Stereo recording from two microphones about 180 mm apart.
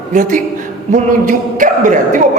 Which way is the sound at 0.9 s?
45° right (ahead or behind).